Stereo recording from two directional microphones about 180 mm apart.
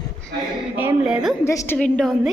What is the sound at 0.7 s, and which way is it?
Speech, 5° right (ahead or behind).